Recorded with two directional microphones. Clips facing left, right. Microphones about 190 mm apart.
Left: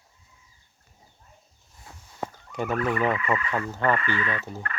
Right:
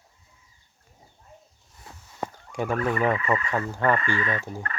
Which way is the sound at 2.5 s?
10° right (ahead or behind).